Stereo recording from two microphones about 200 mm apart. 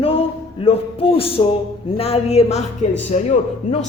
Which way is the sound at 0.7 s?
30° left (ahead or behind).